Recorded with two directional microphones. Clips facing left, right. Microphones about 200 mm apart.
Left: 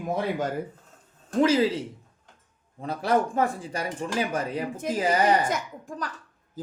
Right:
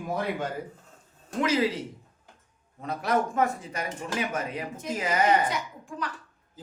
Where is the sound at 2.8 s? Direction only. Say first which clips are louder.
Left 3 dB; 30° left (ahead or behind).